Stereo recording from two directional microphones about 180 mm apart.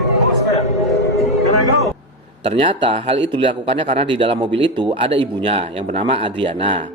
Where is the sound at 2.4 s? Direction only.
30° right (ahead or behind).